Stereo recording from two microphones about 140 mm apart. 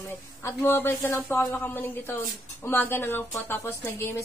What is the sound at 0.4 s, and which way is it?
A woman's voice, 15° left (ahead or behind).